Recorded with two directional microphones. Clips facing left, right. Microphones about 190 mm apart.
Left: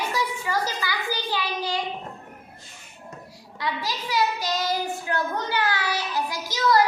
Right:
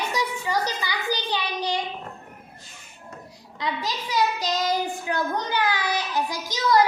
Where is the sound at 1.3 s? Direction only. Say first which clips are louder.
Right 1 dB; 20° right (ahead or behind).